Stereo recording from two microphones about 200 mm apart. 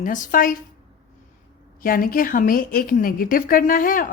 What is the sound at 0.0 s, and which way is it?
Speech, 40° left (ahead or behind).